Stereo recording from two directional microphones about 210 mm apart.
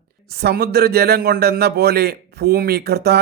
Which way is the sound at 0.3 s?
50° right (ahead or behind).